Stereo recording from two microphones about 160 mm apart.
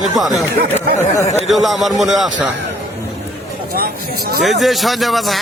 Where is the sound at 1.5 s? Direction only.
Centre (ahead or behind).